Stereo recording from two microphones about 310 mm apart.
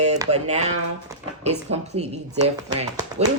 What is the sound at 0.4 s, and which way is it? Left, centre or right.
Speech, right.